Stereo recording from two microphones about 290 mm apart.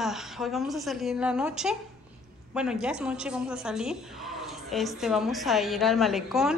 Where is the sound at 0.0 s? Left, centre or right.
Centre.